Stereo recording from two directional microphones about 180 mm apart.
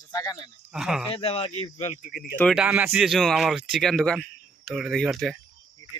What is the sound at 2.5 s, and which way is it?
A man's voice, 10° right (ahead or behind).